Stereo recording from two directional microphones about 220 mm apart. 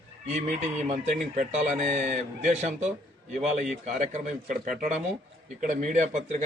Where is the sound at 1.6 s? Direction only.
30° right (ahead or behind).